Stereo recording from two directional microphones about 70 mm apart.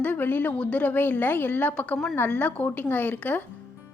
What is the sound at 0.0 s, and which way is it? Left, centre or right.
A woman's voice, left.